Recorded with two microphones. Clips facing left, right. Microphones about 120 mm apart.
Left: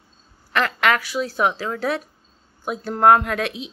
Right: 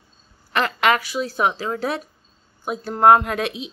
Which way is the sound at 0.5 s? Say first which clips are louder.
Right 1 dB; 10° right (ahead or behind).